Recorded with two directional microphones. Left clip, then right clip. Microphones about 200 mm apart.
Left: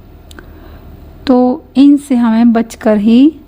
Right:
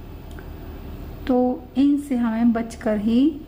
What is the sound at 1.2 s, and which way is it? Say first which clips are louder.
A woman's voice: left 10 dB; 50° left (ahead or behind).